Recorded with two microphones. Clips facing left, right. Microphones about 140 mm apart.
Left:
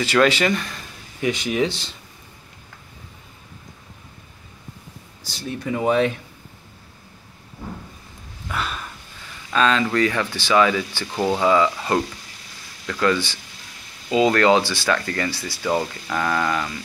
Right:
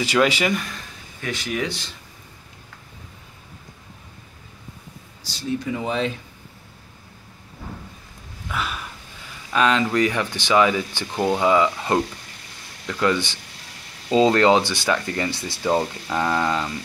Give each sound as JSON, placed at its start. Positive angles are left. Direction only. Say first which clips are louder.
{"t": 0.0, "sound": "speech", "louder": "left 2 dB", "side_deg": -15}
{"t": 1.2, "sound": "speech", "louder": "left 5 dB", "side_deg": 20}
{"t": 5.6, "sound": "speech", "louder": "left 8 dB", "side_deg": 60}
{"t": 8.5, "sound": "a sound", "louder": "even", "side_deg": 0}
{"t": 9.5, "sound": "speech", "louder": "even", "side_deg": -15}